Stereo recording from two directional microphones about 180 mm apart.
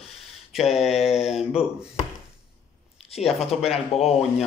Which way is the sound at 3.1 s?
35° left (ahead or behind).